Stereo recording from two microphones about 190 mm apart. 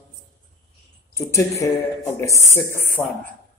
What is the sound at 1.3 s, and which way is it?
A man's voice, 15° left (ahead or behind).